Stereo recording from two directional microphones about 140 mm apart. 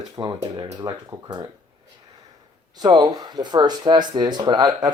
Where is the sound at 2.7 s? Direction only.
30° right (ahead or behind).